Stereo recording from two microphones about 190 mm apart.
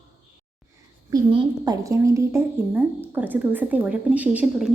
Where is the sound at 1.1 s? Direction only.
20° right (ahead or behind).